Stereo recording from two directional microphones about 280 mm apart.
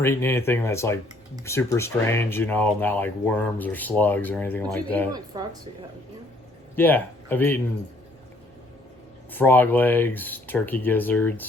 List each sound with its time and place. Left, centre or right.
0.0 s speech: centre
5.1 s speech: centre
6.7 s speech: centre
9.3 s speech: centre